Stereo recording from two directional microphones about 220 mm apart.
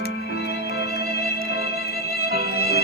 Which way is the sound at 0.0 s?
45° left (ahead or behind).